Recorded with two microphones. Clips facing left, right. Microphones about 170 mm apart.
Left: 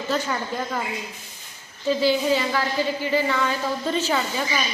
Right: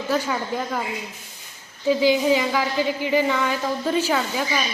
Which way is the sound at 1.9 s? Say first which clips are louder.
Right 2 dB; 15° right (ahead or behind).